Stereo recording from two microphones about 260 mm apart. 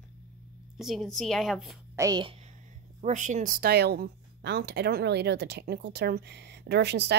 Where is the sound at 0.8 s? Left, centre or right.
Centre.